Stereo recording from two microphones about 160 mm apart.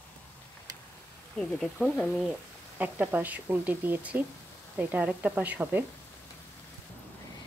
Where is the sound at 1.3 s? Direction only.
5° left (ahead or behind).